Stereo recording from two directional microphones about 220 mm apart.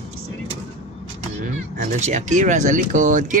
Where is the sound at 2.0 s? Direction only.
35° right (ahead or behind).